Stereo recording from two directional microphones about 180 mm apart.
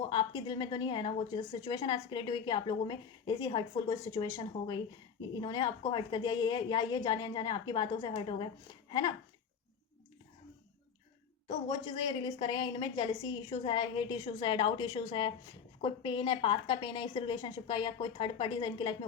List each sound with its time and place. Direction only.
0.1 s a woman's voice: 25° left (ahead or behind)
11.4 s a woman's voice: 25° left (ahead or behind)